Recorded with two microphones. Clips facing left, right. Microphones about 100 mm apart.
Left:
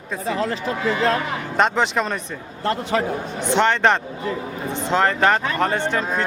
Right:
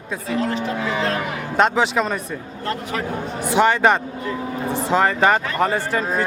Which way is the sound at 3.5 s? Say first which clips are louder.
Right 1 dB; 5° right (ahead or behind).